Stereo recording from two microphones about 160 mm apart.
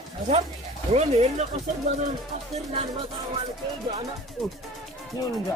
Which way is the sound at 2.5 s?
45° right (ahead or behind).